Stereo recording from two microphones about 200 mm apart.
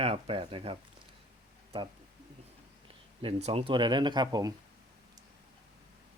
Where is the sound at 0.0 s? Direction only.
30° right (ahead or behind).